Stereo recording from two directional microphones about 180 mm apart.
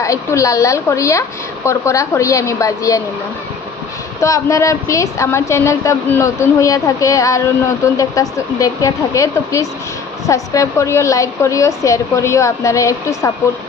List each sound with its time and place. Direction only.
0.0 s a woman's voice: 15° left (ahead or behind)
4.2 s a woman's voice: 15° left (ahead or behind)